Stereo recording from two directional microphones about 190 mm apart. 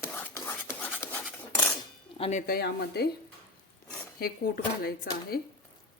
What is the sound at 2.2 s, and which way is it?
Speech, 40° left (ahead or behind).